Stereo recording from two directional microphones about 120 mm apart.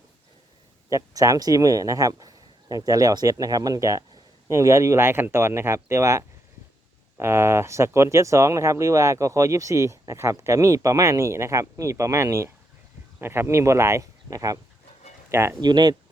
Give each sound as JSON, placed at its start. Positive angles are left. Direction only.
{"t": 0.9, "sound": "speech", "side_deg": -25}
{"t": 15.6, "sound": "speech", "side_deg": -35}